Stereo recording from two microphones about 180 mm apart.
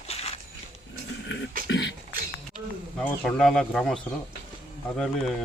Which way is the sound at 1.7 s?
85° left.